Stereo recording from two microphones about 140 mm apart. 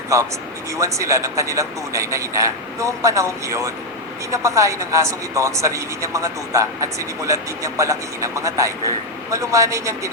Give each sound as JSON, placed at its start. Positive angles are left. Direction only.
{"t": 0.1, "sound": "a man's voice", "side_deg": -20}